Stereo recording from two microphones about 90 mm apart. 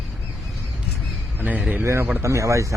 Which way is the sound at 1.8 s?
30° right (ahead or behind).